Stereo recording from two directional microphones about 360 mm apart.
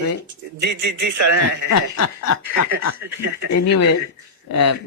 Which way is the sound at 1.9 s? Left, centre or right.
Left.